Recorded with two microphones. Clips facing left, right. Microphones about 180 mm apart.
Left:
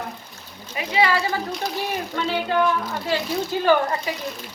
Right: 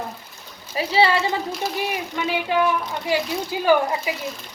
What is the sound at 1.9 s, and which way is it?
A woman's voice, 15° right (ahead or behind).